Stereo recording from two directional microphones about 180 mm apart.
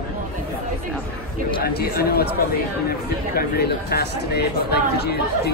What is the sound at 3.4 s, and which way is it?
Speech, 60° left (ahead or behind).